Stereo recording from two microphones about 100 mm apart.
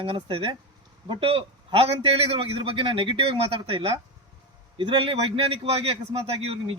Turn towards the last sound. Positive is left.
turn(degrees=-75)  # may be behind; listen again after turning